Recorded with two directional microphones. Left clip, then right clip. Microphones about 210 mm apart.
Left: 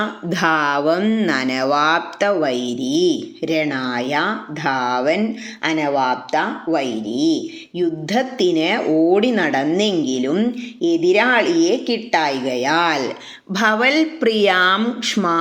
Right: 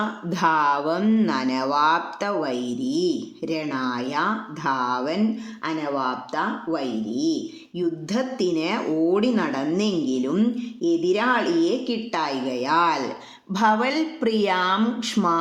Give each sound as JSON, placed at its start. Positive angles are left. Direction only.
{"t": 0.0, "sound": "speech", "side_deg": 10}
{"t": 3.7, "sound": "speech", "side_deg": -55}
{"t": 3.9, "sound": "a woman's voice", "side_deg": 5}